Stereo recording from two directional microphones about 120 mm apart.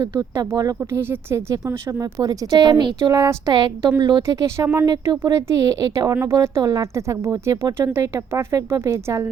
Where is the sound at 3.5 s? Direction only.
35° right (ahead or behind).